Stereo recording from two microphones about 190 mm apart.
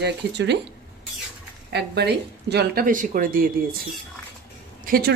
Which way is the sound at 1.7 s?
60° right (ahead or behind).